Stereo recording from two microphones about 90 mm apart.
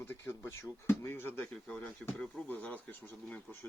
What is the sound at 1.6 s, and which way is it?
Speech, 10° left (ahead or behind).